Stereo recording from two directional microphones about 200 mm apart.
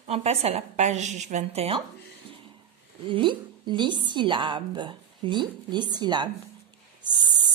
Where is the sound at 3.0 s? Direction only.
25° right (ahead or behind).